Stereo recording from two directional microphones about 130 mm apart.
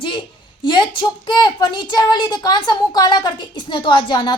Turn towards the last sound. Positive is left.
turn(degrees=35)  # may be behind; listen again after turning